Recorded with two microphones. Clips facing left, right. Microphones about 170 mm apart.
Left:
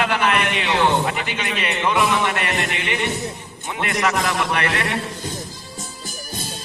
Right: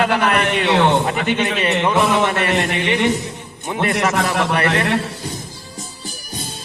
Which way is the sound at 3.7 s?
40° right (ahead or behind).